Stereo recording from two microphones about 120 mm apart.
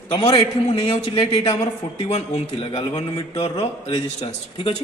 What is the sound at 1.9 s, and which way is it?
A man's voice, 55° left (ahead or behind).